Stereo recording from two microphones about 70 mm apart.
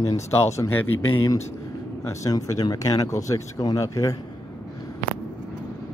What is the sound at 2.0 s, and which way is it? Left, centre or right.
Speech, left.